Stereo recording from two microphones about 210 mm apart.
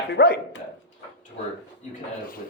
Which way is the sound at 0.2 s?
55° left (ahead or behind).